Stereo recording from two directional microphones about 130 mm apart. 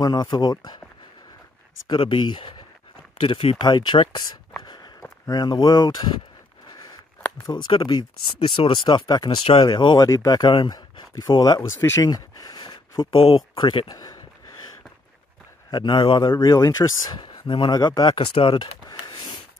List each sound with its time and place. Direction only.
0.0 s speech: 30° left (ahead or behind)
1.9 s speech: 35° left (ahead or behind)
4.6 s a sound: 35° left (ahead or behind)
5.2 s speech: 30° left (ahead or behind)
7.4 s speech: 30° left (ahead or behind)
11.6 s speech: 20° left (ahead or behind)
12.1 s a sound: 30° left (ahead or behind)
13.6 s speech: 35° left (ahead or behind)
15.7 s speech: 35° left (ahead or behind)
17.2 s speech: 40° left (ahead or behind)